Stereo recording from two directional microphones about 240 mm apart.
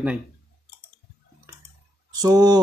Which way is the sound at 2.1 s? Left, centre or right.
Centre.